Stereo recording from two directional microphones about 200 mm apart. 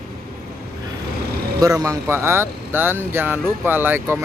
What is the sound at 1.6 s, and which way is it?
Speech, 15° right (ahead or behind).